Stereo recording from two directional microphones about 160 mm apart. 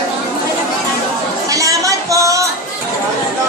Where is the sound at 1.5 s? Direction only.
20° right (ahead or behind).